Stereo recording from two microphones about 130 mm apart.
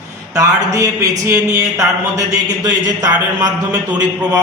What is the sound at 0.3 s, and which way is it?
Speech, 25° right (ahead or behind).